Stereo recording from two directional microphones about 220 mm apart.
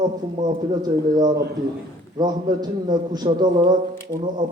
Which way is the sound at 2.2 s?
15° right (ahead or behind).